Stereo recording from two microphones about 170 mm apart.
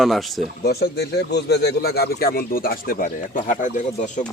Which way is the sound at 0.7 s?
70° left (ahead or behind).